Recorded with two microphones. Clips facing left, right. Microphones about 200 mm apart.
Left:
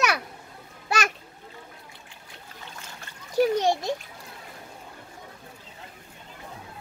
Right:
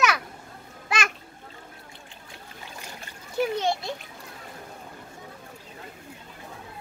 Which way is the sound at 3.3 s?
40° left (ahead or behind).